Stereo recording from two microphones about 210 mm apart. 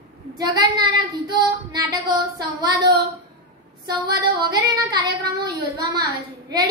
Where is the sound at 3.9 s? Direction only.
20° right (ahead or behind).